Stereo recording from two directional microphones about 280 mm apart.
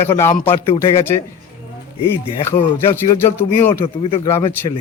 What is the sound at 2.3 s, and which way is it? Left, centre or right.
Speech, centre.